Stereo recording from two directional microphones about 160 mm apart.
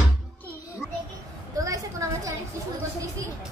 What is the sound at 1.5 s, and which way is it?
Speech, 20° right (ahead or behind).